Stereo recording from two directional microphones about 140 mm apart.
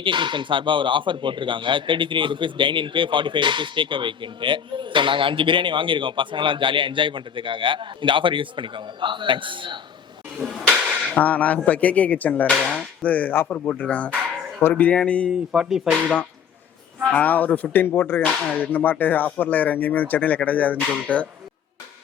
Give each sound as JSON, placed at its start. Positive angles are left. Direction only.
{"t": 0.0, "sound": "speech", "side_deg": -35}
{"t": 10.3, "sound": "a sound", "side_deg": -5}
{"t": 11.1, "sound": "speech", "side_deg": 10}
{"t": 15.3, "sound": "speech", "side_deg": 0}
{"t": 17.1, "sound": "speech", "side_deg": 10}